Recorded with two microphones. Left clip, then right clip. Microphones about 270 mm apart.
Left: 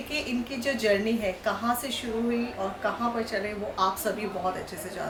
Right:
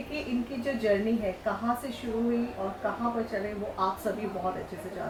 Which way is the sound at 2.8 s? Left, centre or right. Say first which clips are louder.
Left 2 dB; centre.